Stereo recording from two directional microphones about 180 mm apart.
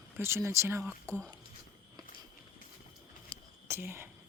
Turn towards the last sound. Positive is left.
turn(degrees=-15)  # may be behind; listen again after turning